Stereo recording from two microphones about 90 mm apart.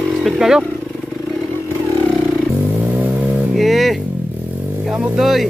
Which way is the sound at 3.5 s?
Centre (ahead or behind).